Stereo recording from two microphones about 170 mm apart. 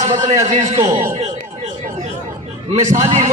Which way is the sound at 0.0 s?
45° right (ahead or behind).